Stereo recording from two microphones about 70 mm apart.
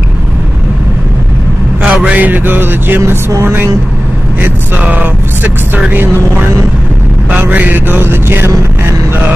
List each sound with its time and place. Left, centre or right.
1.8 s a sound: centre
3.4 s a woman's voice: right
4.4 s mantra: right
7.2 s mantra: right